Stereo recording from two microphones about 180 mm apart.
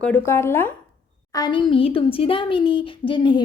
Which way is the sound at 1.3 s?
25° left (ahead or behind).